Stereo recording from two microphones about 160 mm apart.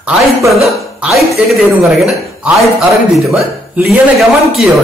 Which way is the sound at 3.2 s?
Centre (ahead or behind).